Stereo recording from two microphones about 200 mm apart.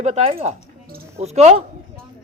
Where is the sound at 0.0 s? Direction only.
30° right (ahead or behind).